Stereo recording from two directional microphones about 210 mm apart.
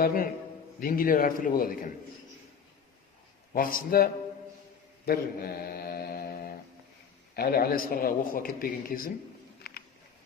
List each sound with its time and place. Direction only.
0.0 s a man's voice: 45° left (ahead or behind)
3.5 s a man's voice: 40° left (ahead or behind)
5.0 s mantra: 45° left (ahead or behind)
7.3 s a man's voice: 45° left (ahead or behind)
9.6 s a sound: 45° left (ahead or behind)